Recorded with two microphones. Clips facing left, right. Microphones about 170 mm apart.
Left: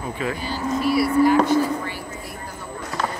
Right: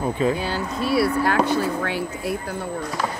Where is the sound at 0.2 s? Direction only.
30° right (ahead or behind).